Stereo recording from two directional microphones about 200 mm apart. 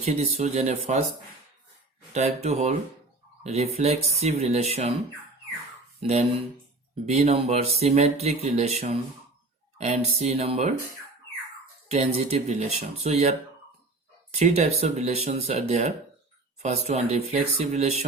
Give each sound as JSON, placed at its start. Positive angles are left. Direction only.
{"t": 0.0, "sound": "speech", "side_deg": -35}
{"t": 2.1, "sound": "speech", "side_deg": -30}
{"t": 6.0, "sound": "speech", "side_deg": -30}
{"t": 11.9, "sound": "speech", "side_deg": -35}
{"t": 14.3, "sound": "speech", "side_deg": -35}